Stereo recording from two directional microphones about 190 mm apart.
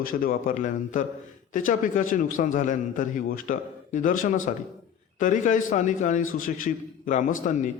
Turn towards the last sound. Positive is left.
turn(degrees=40)  # may be behind; listen again after turning